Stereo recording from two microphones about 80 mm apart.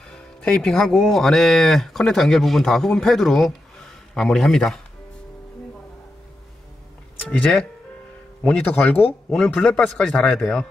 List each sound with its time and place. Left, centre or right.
0.1 s speech: centre
8.5 s speech: centre
9.5 s a man's voice: centre